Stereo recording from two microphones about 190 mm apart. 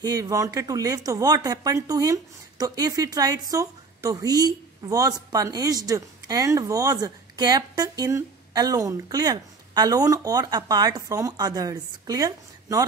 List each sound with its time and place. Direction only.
0.0 s speech: 20° right (ahead or behind)